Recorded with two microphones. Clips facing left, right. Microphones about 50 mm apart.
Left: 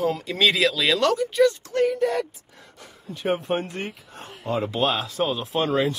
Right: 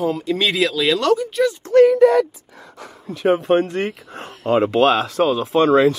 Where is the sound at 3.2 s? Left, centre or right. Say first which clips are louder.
Right 9 dB; right.